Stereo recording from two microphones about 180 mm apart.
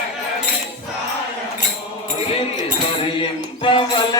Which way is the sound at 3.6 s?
25° left (ahead or behind).